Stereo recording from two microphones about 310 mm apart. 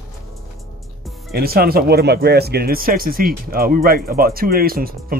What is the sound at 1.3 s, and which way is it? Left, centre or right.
Speech, right.